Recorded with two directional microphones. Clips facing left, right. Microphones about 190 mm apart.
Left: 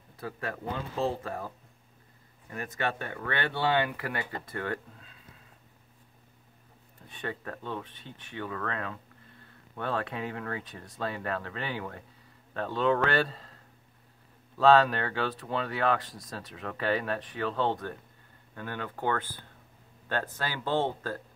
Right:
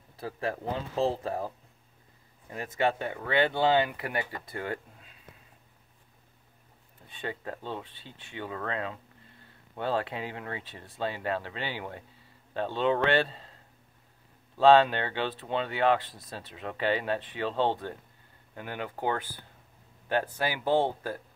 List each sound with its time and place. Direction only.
0.2 s speech: 30° right (ahead or behind)
2.5 s speech: 25° right (ahead or behind)
7.2 s speech: 25° right (ahead or behind)
14.6 s speech: 25° right (ahead or behind)
18.5 s speech: 15° right (ahead or behind)